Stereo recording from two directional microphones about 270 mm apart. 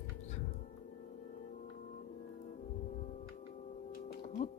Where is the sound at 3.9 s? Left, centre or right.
Left.